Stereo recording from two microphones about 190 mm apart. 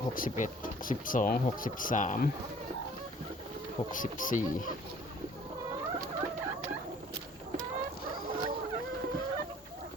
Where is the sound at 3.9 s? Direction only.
45° left (ahead or behind).